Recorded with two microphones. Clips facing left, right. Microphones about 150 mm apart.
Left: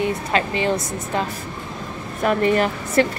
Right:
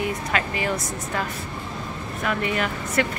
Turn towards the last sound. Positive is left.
turn(degrees=40)  # may be behind; listen again after turning